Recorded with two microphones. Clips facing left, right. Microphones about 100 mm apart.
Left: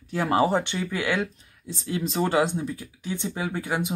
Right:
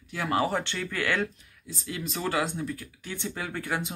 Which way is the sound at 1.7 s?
30° left (ahead or behind).